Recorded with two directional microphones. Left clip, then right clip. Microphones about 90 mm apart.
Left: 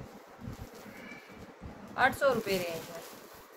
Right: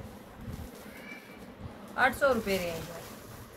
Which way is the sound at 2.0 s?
90° left.